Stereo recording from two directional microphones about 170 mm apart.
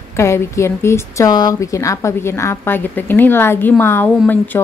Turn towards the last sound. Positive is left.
turn(degrees=10)  # may be behind; listen again after turning